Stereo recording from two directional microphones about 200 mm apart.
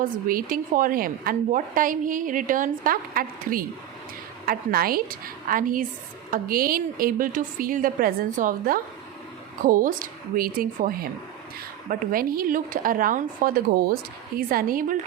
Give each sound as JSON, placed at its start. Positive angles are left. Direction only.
{"t": 0.0, "sound": "a woman's voice", "side_deg": -45}